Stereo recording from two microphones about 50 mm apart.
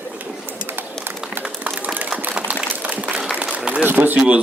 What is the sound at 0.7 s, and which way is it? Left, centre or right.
Run, right.